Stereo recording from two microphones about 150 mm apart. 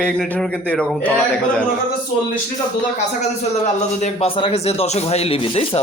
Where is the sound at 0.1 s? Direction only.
10° left (ahead or behind).